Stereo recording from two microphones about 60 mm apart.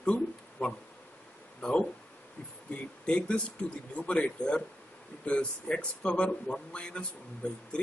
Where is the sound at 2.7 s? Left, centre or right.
Centre.